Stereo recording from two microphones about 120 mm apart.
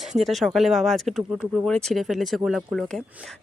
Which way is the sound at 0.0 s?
Centre (ahead or behind).